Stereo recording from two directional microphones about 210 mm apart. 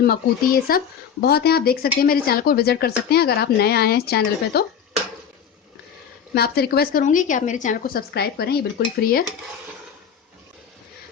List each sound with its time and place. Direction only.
0.7 s speech: 45° left (ahead or behind)
6.3 s speech: 50° left (ahead or behind)